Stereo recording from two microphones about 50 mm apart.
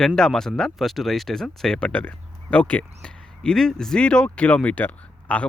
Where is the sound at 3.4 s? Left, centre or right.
Centre; by 5.4 s left.